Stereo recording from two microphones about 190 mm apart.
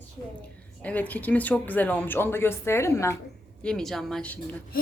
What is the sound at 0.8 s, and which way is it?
Speech, 10° left (ahead or behind).